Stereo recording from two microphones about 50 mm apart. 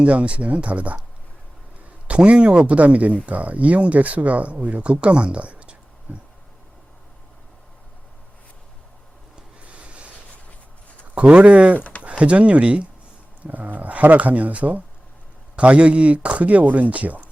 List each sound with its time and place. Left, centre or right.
0.0 s speech: right
2.0 s speech: right
9.7 s a sound: right
11.1 s speech: right
11.8 s a sound: left
12.0 s speech: right
13.4 s speech: right